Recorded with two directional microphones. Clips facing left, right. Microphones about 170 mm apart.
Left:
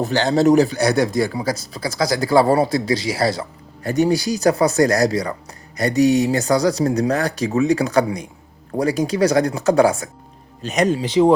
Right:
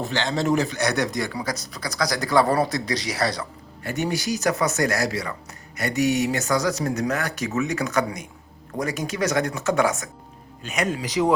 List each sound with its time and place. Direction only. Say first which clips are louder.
0.0 s a man's voice: left 8 dB; 40° left (ahead or behind)